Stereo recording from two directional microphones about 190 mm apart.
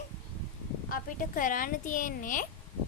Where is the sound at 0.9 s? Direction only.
45° left (ahead or behind).